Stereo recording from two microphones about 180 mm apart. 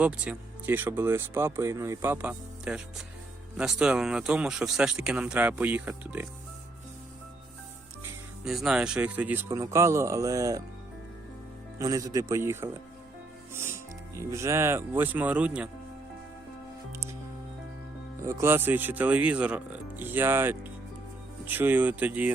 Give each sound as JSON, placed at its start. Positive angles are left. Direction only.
{"t": 0.0, "sound": "speech", "side_deg": -5}
{"t": 8.4, "sound": "speech", "side_deg": -5}
{"t": 11.8, "sound": "speech", "side_deg": -20}
{"t": 18.2, "sound": "speech", "side_deg": -15}